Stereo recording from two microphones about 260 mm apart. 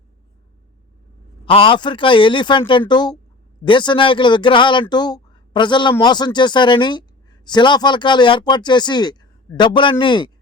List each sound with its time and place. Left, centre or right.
1.5 s speech: centre